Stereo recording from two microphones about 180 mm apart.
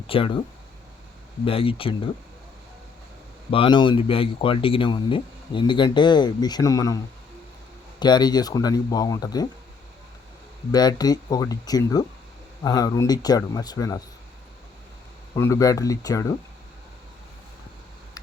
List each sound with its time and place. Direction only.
0.1 s speech: 30° left (ahead or behind)
1.5 s speech: 30° left (ahead or behind)
3.5 s speech: 30° left (ahead or behind)
10.7 s speech: 20° left (ahead or behind)
15.4 s speech: 15° left (ahead or behind)